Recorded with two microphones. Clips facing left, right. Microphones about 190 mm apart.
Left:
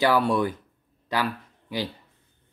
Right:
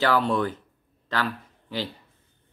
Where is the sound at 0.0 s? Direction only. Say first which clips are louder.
Left 1 dB; 10° left (ahead or behind).